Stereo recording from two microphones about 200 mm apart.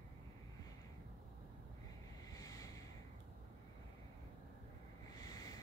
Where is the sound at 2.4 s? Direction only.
15° left (ahead or behind).